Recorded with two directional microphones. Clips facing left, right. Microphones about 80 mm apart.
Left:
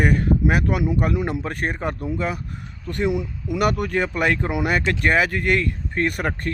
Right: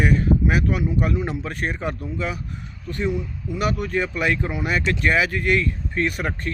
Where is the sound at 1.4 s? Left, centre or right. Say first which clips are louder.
Left 1 dB; left.